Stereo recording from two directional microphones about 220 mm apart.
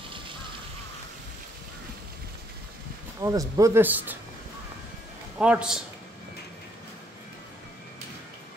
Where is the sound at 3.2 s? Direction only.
15° right (ahead or behind).